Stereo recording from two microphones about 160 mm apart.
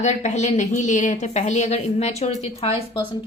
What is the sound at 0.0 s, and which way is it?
A woman's voice, 45° left (ahead or behind).